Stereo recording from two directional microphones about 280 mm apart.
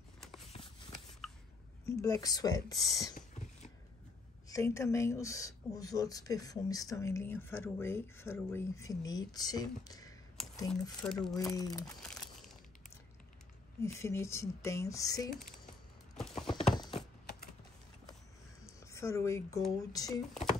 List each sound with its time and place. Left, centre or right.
1.9 s speech: centre
3.2 s a sound: left
4.5 s speech: centre
10.7 s speech: centre
11.3 s speech: centre
13.8 s speech: centre
16.3 s clip-clop: centre
16.7 s a sound: centre
18.9 s speech: centre